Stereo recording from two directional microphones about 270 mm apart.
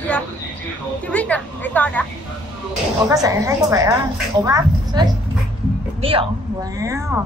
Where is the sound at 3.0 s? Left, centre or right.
Centre.